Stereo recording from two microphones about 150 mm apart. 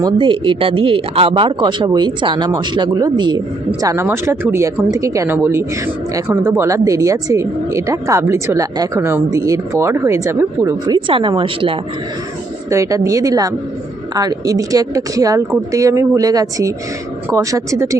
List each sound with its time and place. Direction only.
0.0 s speech: 35° right (ahead or behind)
11.1 s a woman's voice: 35° right (ahead or behind)
12.7 s speech: 20° right (ahead or behind)